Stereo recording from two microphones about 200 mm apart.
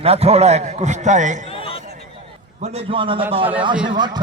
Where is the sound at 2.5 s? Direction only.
30° right (ahead or behind).